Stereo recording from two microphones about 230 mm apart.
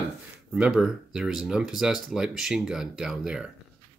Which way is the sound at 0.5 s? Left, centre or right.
Centre.